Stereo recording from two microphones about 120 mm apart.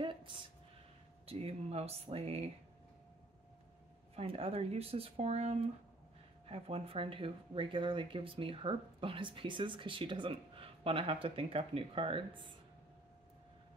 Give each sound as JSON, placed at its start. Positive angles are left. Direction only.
{"t": 0.0, "sound": "a sound", "side_deg": -45}
{"t": 1.2, "sound": "speech", "side_deg": -55}
{"t": 4.1, "sound": "speech", "side_deg": -55}